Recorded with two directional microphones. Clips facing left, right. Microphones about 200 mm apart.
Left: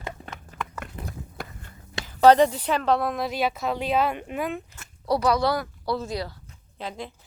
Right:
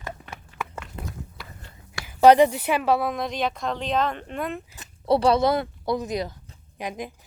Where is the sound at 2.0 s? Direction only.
10° right (ahead or behind).